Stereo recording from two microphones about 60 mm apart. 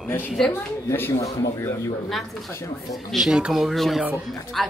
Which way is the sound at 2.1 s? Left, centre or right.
Centre.